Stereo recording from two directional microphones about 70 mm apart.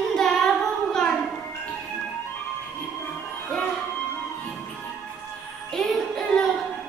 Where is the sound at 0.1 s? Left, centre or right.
Centre.